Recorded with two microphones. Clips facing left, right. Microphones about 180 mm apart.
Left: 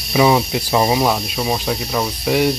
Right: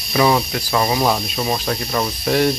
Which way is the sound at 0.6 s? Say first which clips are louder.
Left 3 dB; 25° left (ahead or behind).